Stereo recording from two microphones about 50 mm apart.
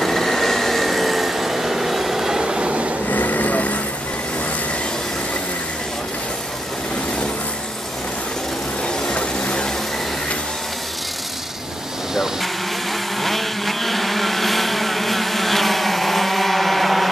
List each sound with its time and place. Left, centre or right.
0.0 s vehicle: centre
3.1 s vehicle: left
8.8 s a sound: left
12.1 s vehicle: centre
13.2 s vehicle: centre